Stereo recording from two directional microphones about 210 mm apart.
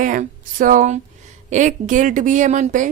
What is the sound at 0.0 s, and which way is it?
Speech, 40° right (ahead or behind).